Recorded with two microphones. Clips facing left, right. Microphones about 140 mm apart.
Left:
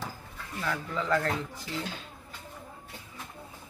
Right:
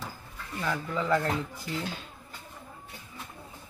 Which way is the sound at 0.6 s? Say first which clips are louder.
Right 2 dB; 5° right (ahead or behind).